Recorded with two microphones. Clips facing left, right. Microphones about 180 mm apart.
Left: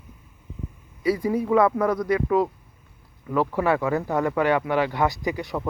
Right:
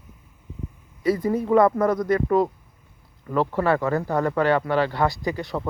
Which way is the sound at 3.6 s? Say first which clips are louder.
Right 1 dB; 10° left (ahead or behind).